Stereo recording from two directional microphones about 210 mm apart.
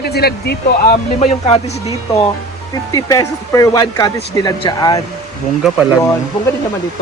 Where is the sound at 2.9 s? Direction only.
15° left (ahead or behind).